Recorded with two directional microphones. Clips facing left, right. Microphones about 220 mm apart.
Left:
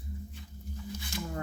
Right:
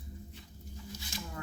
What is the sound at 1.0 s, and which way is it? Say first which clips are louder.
Music: left 7 dB; 55° left (ahead or behind).